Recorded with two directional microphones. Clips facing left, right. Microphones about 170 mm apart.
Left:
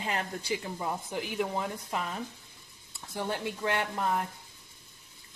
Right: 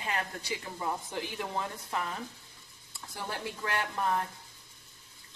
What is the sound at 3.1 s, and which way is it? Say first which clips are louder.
Speech: left 5 dB; 25° left (ahead or behind).